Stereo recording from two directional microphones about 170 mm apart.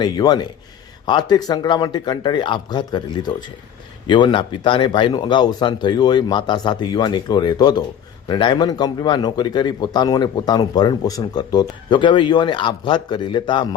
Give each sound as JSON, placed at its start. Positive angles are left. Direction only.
{"t": 0.0, "sound": "speech", "side_deg": 25}